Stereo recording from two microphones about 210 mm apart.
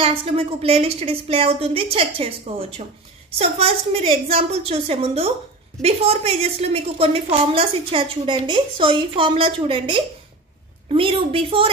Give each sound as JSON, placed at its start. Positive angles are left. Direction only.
{"t": 0.0, "sound": "a woman's voice", "side_deg": -25}